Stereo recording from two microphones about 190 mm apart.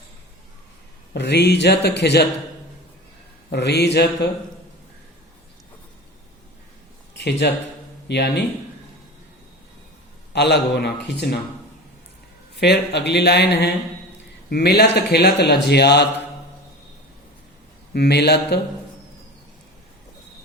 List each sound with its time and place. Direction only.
1.1 s a man's voice: 65° left (ahead or behind)
3.5 s a man's voice: 60° left (ahead or behind)
7.2 s a man's voice: 60° left (ahead or behind)
10.3 s a man's voice: 60° left (ahead or behind)
12.5 s a man's voice: 60° left (ahead or behind)
17.9 s a man's voice: 60° left (ahead or behind)